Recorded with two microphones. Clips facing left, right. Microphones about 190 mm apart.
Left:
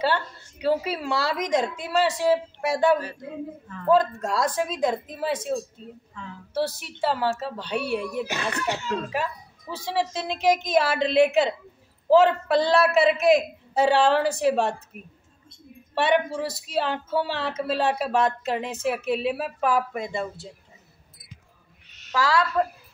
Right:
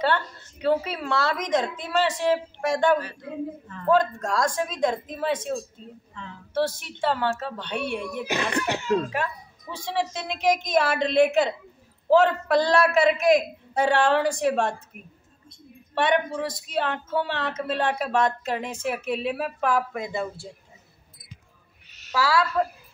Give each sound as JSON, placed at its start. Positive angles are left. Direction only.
{"t": 0.0, "sound": "a woman's voice", "side_deg": 10}
{"t": 8.3, "sound": "a child's voice", "side_deg": -15}
{"t": 9.1, "sound": "a woman's voice", "side_deg": 5}
{"t": 15.9, "sound": "a woman's voice", "side_deg": 5}
{"t": 21.9, "sound": "a sound", "side_deg": -5}